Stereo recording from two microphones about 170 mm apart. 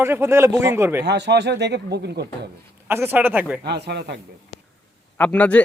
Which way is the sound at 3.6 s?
80° right.